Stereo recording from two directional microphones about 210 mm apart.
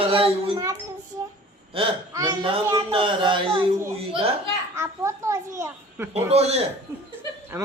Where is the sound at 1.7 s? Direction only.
25° right (ahead or behind).